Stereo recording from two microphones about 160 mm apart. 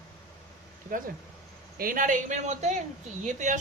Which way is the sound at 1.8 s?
60° right (ahead or behind).